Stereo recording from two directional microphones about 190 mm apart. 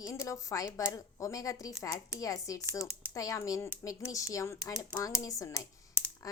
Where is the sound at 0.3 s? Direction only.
15° left (ahead or behind).